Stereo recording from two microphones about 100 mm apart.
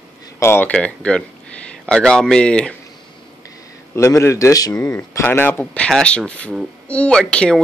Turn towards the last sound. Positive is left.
turn(degrees=10)  # may be behind; listen again after turning